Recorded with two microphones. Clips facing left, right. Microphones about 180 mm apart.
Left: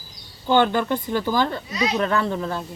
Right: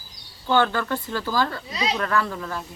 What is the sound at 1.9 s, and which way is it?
Speech, 25° left (ahead or behind).